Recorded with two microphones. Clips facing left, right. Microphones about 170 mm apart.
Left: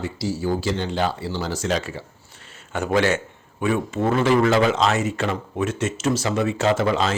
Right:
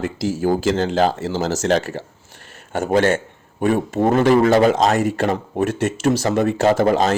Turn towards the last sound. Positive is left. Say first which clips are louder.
# right 5 dB
turn(degrees=-45)  # may be behind; listen again after turning